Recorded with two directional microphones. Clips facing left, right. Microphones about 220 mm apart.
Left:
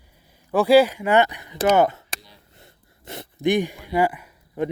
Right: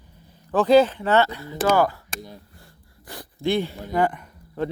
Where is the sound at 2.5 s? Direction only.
20° left (ahead or behind).